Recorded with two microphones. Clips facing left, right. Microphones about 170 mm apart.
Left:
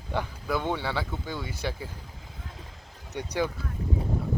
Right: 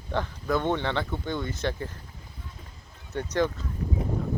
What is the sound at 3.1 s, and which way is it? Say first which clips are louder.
Speech: right 3 dB; 10° left (ahead or behind).